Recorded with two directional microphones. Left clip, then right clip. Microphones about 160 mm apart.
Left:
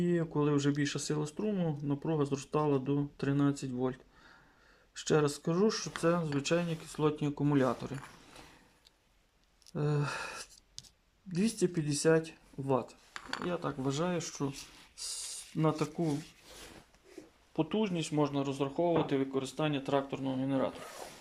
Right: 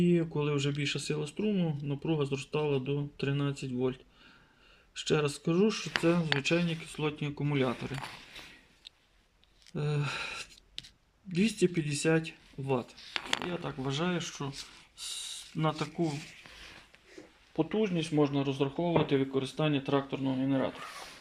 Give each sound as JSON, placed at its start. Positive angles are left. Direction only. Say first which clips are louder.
{"t": 0.0, "sound": "speech", "louder": "right 2 dB", "side_deg": 0}
{"t": 4.9, "sound": "speech", "louder": "even", "side_deg": 0}
{"t": 9.7, "sound": "speech", "louder": "even", "side_deg": 0}
{"t": 17.5, "sound": "speech", "louder": "right 2 dB", "side_deg": 5}
{"t": 20.7, "sound": "speech", "louder": "right 2 dB", "side_deg": 45}